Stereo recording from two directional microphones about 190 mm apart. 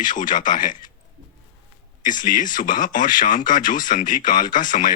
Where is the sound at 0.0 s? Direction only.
45° left (ahead or behind).